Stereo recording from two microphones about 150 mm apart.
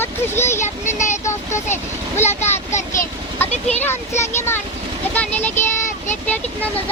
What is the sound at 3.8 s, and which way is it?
Speech, 15° left (ahead or behind).